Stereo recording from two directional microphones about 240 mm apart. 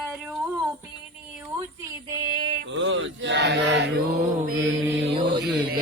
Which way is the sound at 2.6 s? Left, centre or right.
Right.